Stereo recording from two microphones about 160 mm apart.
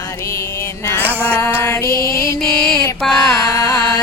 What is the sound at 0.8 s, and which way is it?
Music, 15° left (ahead or behind).